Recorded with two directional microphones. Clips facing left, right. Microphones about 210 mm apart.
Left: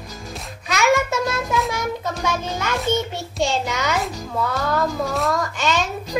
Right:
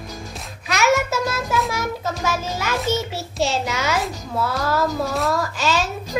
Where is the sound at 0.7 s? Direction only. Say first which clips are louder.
Even; centre (ahead or behind).